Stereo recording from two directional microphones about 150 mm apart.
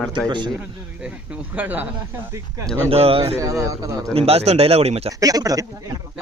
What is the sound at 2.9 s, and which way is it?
Speech, 40° right (ahead or behind).